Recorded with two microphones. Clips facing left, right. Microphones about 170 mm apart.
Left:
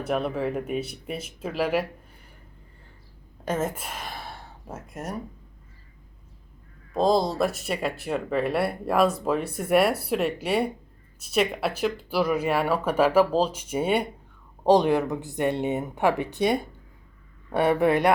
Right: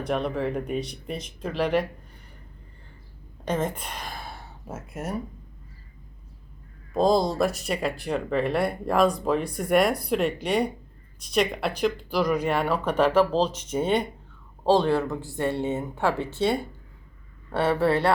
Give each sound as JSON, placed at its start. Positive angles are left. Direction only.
{"t": 0.0, "sound": "speech", "side_deg": 5}
{"t": 3.4, "sound": "speech", "side_deg": 5}
{"t": 6.9, "sound": "speech", "side_deg": 0}